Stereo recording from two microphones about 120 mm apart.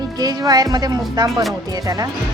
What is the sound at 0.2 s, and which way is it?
Speech, 30° right (ahead or behind).